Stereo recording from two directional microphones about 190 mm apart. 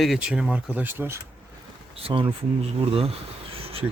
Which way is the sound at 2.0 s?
30° right (ahead or behind).